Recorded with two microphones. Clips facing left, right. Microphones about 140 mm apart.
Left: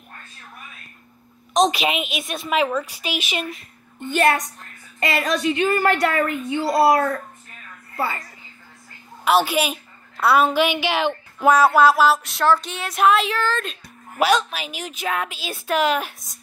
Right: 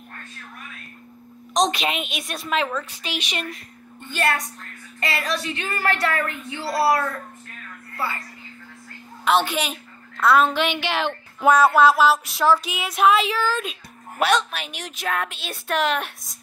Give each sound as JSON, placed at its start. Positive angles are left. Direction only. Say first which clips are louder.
{"t": 1.5, "sound": "a child's voice", "louder": "left 3 dB", "side_deg": 5}
{"t": 5.0, "sound": "a woman's voice", "louder": "left 5 dB", "side_deg": 20}
{"t": 9.2, "sound": "a child's voice", "louder": "left 2 dB", "side_deg": 5}